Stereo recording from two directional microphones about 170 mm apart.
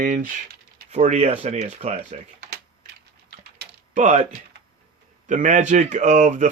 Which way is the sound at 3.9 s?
45° right (ahead or behind).